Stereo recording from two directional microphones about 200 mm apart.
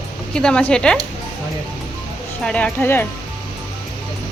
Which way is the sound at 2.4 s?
5° left (ahead or behind).